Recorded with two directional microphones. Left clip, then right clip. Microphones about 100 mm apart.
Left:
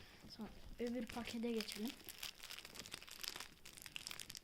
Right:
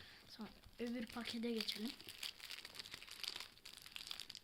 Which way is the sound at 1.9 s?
10° left (ahead or behind).